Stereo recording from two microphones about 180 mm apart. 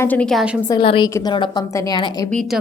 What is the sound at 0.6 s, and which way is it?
A woman's voice, 25° left (ahead or behind).